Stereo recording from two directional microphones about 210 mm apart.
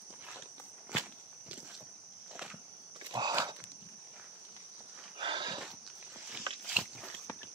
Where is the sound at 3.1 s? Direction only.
20° right (ahead or behind).